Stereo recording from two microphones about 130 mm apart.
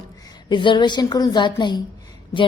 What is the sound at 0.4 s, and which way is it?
A woman's voice, 35° left (ahead or behind).